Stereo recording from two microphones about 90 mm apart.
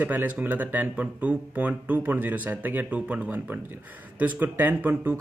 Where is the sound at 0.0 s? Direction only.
20° right (ahead or behind).